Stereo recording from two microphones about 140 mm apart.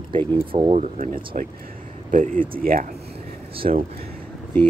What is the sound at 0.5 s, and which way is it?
Speech, 45° right (ahead or behind).